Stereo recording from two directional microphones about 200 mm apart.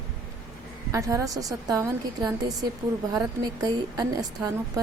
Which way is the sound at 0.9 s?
15° right (ahead or behind).